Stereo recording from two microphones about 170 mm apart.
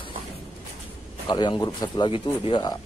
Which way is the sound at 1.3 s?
25° left (ahead or behind).